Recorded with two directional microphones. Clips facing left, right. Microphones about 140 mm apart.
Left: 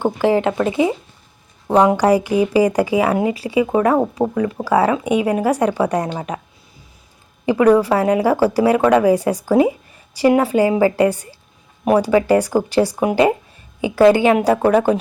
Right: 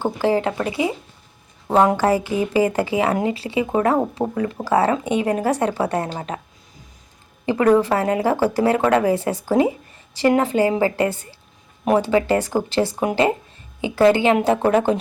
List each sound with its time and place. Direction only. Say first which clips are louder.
0.0 s speech: left 3 dB; 20° left (ahead or behind)
1.6 s speech: left 3 dB; 15° left (ahead or behind)
4.6 s speech: left 2 dB; centre (ahead or behind)
5.0 s speech: left 3 dB; 10° left (ahead or behind)
7.4 s speech: left 3 dB; 15° left (ahead or behind)